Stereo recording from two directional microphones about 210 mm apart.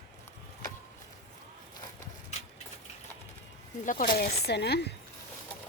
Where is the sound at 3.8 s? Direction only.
40° left (ahead or behind).